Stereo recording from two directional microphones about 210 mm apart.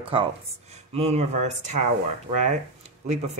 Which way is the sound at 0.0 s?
25° right (ahead or behind).